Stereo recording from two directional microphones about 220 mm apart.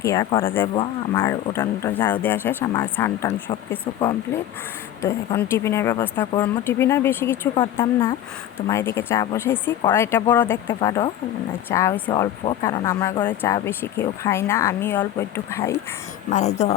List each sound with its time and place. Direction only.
0.0 s speech: 15° left (ahead or behind)
1.1 s speech: 10° left (ahead or behind)
16.3 s speech: 30° left (ahead or behind)